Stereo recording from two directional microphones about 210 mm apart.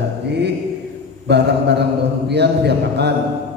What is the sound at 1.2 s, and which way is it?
Speech, 55° right (ahead or behind).